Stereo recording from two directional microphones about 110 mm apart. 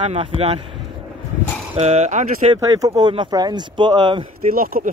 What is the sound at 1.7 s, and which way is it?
Speech, 80° right.